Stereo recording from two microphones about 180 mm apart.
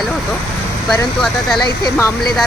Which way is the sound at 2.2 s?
Centre (ahead or behind).